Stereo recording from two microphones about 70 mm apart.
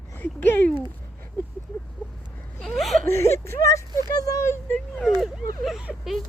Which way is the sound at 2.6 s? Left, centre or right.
Centre.